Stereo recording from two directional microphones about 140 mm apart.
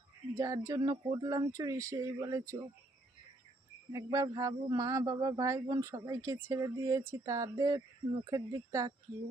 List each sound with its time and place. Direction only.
0.3 s speech: 20° right (ahead or behind)
3.9 s speech: 25° right (ahead or behind)